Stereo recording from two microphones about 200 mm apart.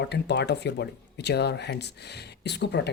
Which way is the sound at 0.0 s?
60° left (ahead or behind).